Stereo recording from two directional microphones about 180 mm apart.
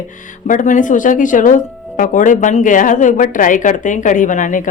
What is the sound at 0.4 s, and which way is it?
Speech, 45° left (ahead or behind).